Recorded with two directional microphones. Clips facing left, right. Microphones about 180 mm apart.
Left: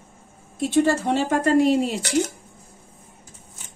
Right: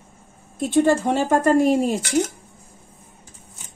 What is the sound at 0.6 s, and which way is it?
A woman's voice, 50° right (ahead or behind).